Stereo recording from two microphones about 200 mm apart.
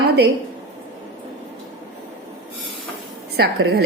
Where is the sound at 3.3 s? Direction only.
50° right (ahead or behind).